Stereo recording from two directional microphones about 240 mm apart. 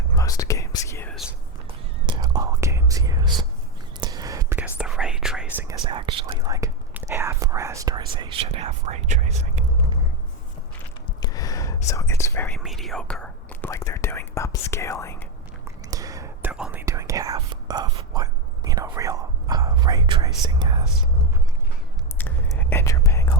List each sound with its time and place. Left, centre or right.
0.2 s whispering: centre
2.0 s whispering: centre
5.5 s whispering: centre
11.2 s whispering: centre
12.5 s whispering: centre
15.9 s whispering: centre
22.2 s whispering: centre